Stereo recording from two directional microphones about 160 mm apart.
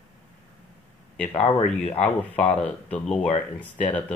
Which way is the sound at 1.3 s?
40° left (ahead or behind).